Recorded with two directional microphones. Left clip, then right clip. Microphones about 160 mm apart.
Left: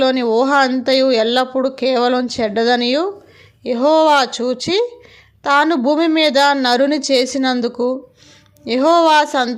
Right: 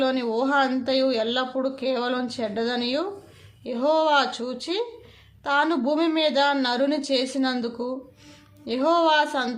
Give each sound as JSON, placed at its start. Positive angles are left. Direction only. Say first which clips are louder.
{"t": 0.0, "sound": "speech", "louder": "left 9 dB", "side_deg": 40}